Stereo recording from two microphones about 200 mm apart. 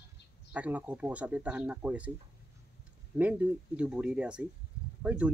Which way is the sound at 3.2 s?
10° right (ahead or behind).